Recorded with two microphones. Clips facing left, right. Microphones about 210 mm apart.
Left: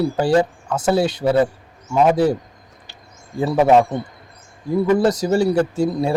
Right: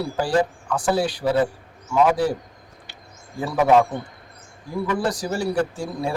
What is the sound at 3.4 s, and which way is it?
Speech, 25° left (ahead or behind).